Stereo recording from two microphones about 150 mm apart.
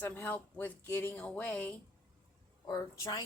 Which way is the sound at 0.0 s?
10° left (ahead or behind).